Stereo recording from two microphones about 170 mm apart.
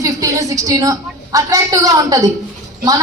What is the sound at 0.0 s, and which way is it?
A woman's voice, 20° right (ahead or behind).